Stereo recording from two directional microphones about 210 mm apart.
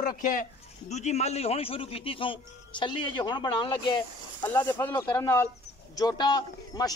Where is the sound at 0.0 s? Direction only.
40° left (ahead or behind); by 4.0 s 20° left (ahead or behind).